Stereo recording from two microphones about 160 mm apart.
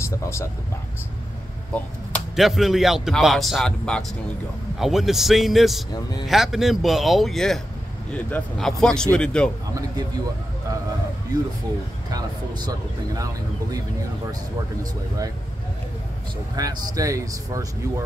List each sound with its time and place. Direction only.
0.0 s speech: 15° left (ahead or behind)
1.7 s speech: 5° left (ahead or behind)
11.3 s speech: 25° right (ahead or behind)
16.5 s speech: 20° right (ahead or behind)